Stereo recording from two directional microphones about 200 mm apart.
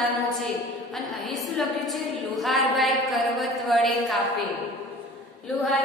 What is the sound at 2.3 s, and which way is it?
A woman's voice, centre (ahead or behind).